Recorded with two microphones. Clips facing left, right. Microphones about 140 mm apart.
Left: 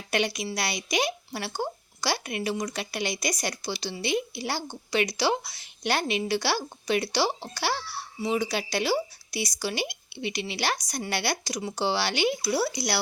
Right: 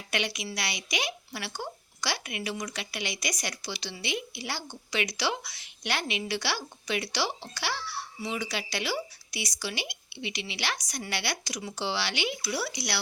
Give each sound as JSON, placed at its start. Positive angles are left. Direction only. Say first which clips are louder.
{"t": 0.1, "sound": "a woman's voice", "louder": "left 5 dB", "side_deg": 40}